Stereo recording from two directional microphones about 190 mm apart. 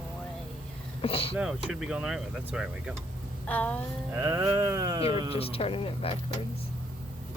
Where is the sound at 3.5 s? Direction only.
10° left (ahead or behind).